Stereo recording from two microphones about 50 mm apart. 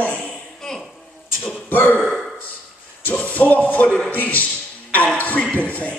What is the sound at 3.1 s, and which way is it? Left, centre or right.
A man's voice, left.